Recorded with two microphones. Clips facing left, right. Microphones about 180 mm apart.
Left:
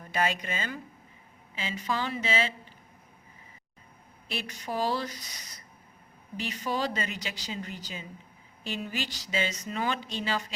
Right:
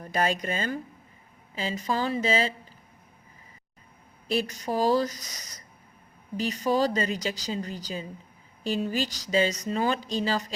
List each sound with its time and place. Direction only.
0.0 s a woman's voice: 40° right (ahead or behind)
4.3 s a woman's voice: 40° right (ahead or behind)